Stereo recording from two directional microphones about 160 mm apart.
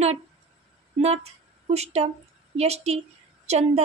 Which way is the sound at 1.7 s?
40° right (ahead or behind).